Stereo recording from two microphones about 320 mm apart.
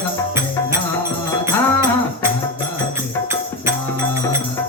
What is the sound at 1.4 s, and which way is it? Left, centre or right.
Music, centre.